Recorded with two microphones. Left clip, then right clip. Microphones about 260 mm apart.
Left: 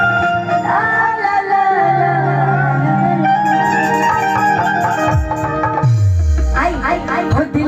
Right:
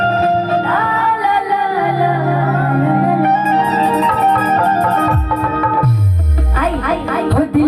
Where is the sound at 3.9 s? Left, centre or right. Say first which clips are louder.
Right 1 dB; right.